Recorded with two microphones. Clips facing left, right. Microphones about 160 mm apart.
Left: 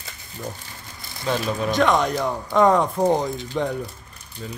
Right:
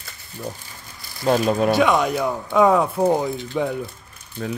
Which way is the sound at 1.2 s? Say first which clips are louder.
Right 6 dB; 40° right (ahead or behind).